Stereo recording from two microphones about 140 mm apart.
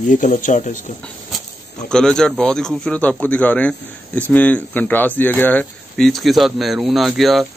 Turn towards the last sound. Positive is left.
turn(degrees=0)  # may be behind; listen again after turning